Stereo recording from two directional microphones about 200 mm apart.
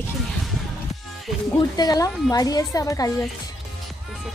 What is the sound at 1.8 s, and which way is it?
A woman's voice, 20° left (ahead or behind).